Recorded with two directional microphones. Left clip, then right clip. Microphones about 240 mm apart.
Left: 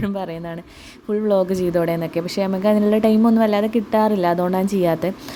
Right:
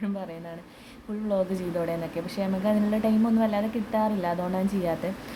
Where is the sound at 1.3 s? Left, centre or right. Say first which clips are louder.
Left 8 dB; left.